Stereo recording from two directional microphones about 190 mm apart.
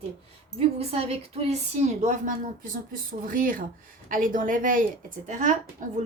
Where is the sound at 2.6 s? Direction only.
45° right (ahead or behind).